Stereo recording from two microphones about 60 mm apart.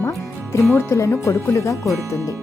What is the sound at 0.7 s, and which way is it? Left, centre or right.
Speech, left.